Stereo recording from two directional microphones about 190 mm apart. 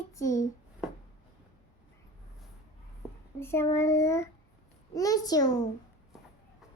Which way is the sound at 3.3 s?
15° left (ahead or behind).